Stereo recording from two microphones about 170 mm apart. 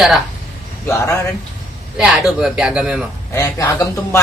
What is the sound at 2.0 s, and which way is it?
Speech, 5° right (ahead or behind).